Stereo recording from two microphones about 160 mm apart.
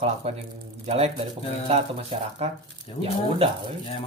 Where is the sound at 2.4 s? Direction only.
40° right (ahead or behind).